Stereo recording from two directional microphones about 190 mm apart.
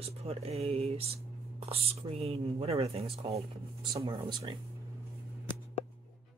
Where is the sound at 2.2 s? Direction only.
30° right (ahead or behind).